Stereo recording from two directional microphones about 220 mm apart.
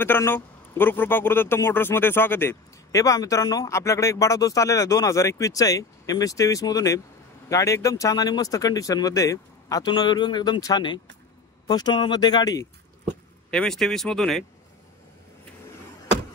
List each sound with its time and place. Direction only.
0.0 s speech: 10° left (ahead or behind)
13.5 s speech: 5° left (ahead or behind)